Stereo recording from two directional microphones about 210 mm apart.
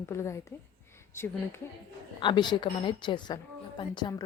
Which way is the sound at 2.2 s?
25° left (ahead or behind).